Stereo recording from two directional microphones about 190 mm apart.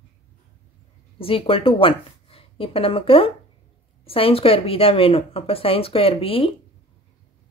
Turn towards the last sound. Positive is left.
turn(degrees=30)  # may be behind; listen again after turning